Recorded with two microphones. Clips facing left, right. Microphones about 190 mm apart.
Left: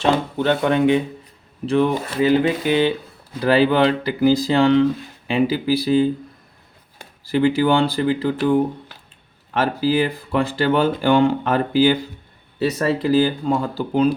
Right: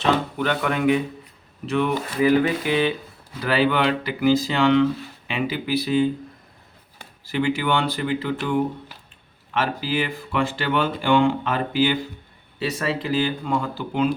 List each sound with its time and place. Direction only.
0.3 s speech: 30° left (ahead or behind)
7.3 s speech: 35° left (ahead or behind)